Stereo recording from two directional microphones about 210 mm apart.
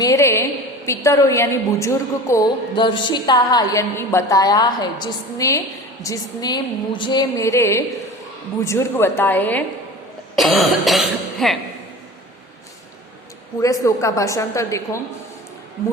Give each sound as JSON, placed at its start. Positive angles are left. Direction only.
{"t": 0.0, "sound": "a sound", "side_deg": 15}
{"t": 0.9, "sound": "a woman's voice", "side_deg": 15}
{"t": 13.8, "sound": "a woman's voice", "side_deg": 15}